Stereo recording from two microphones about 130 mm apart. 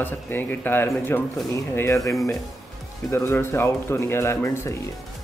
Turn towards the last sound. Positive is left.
turn(degrees=20)  # may be behind; listen again after turning